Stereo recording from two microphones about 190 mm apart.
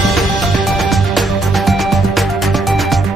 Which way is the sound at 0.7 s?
Centre (ahead or behind).